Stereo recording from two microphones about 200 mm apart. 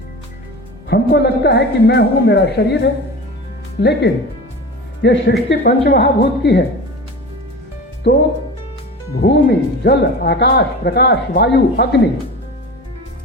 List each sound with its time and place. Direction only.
0.9 s speech: 55° left (ahead or behind)
8.1 s speech: 55° left (ahead or behind)
9.2 s speech: 55° left (ahead or behind)